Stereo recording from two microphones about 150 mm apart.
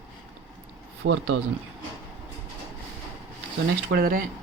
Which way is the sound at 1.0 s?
90° right.